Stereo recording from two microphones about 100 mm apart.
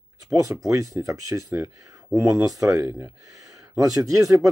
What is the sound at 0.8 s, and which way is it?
Speech, 30° right (ahead or behind).